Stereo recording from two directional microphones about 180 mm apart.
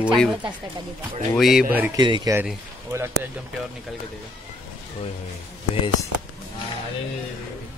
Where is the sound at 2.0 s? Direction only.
25° right (ahead or behind).